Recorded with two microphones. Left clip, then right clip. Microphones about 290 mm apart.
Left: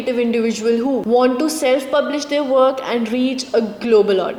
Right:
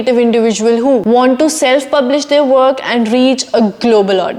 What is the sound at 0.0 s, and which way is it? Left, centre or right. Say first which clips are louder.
A woman's voice: right 8 dB; right.